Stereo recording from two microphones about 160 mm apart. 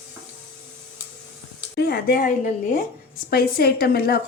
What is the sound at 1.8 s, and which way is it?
Speech, 80° left.